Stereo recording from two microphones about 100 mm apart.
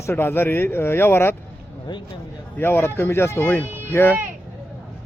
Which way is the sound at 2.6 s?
25° left (ahead or behind).